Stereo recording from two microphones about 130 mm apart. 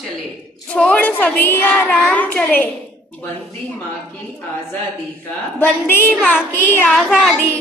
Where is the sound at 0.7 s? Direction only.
10° left (ahead or behind).